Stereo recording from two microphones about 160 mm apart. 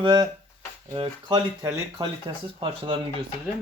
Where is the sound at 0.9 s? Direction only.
30° right (ahead or behind).